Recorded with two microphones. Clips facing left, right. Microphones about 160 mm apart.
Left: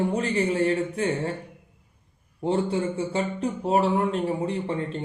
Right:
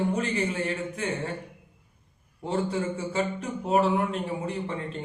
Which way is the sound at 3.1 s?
35° left (ahead or behind).